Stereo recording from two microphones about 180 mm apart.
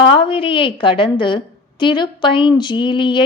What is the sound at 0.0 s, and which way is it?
Speech, 30° left (ahead or behind).